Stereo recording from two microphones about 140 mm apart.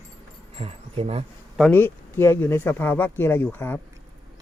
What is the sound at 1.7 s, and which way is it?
Speech, 15° left (ahead or behind).